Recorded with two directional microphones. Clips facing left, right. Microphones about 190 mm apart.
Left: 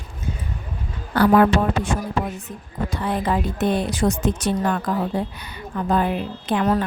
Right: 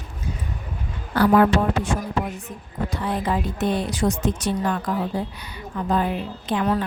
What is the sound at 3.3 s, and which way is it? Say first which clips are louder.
A woman's voice: left 2 dB; 55° left (ahead or behind).